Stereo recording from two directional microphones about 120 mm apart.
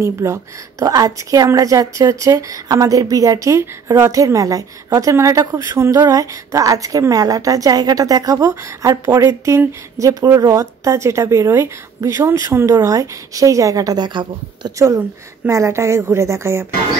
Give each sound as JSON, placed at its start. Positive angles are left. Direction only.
{"t": 0.0, "sound": "a woman's voice", "side_deg": -25}
{"t": 14.8, "sound": "a woman's voice", "side_deg": -25}